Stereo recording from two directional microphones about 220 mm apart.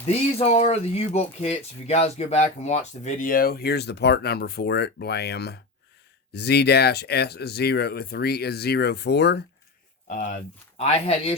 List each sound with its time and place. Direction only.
0.1 s speech: 30° left (ahead or behind); by 9.4 s 50° left (ahead or behind)
10.1 s speech: 35° left (ahead or behind)